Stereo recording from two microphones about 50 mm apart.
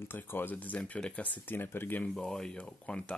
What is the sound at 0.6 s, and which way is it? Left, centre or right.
Speech, left.